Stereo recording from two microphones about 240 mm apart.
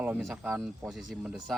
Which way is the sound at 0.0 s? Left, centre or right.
Centre.